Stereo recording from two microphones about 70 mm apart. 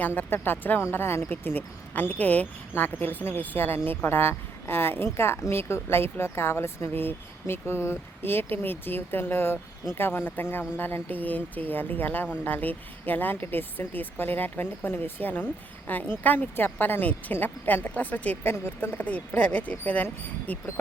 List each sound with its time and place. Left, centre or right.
0.0 s a woman's voice: left